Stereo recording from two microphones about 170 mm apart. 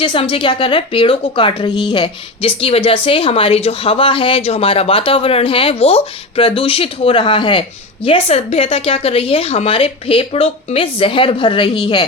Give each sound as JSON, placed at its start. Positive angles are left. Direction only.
{"t": 0.0, "sound": "a woman's voice", "side_deg": 30}